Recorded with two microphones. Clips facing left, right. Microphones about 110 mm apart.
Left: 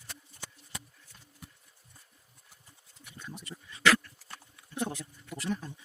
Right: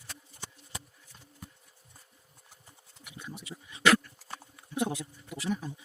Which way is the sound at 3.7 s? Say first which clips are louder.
Right 2 dB; 20° right (ahead or behind).